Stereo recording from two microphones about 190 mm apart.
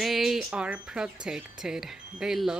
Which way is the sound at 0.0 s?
Centre (ahead or behind).